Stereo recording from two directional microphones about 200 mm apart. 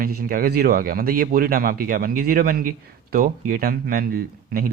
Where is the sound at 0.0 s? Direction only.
45° right (ahead or behind).